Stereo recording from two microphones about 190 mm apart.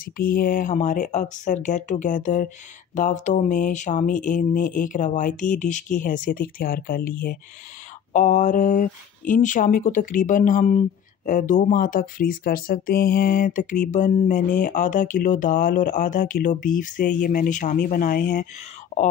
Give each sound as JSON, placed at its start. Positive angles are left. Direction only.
{"t": 0.0, "sound": "speech", "side_deg": 50}